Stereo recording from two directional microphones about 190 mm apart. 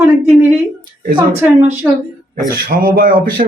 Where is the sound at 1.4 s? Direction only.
10° right (ahead or behind).